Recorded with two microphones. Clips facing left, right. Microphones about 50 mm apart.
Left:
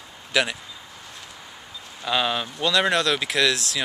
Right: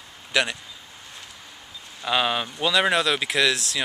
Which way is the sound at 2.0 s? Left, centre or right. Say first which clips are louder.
Right 1 dB; centre.